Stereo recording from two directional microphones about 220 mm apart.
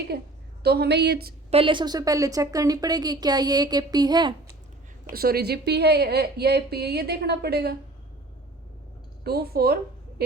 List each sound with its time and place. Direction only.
0.1 s a woman's voice: 45° right (ahead or behind)
1.5 s speech: 25° right (ahead or behind)
5.1 s a woman's voice: 45° right (ahead or behind)
9.2 s a woman's voice: 45° right (ahead or behind)